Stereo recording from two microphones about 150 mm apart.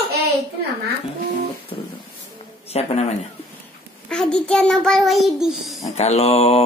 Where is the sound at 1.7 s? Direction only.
30° left (ahead or behind).